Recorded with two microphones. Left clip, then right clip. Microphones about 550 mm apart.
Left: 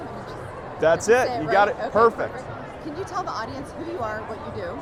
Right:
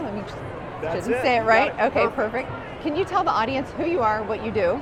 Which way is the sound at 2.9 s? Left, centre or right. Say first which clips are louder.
Right 8 dB; right.